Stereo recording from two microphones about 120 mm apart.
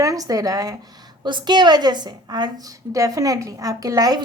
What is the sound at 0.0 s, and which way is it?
A woman's voice, 30° right (ahead or behind).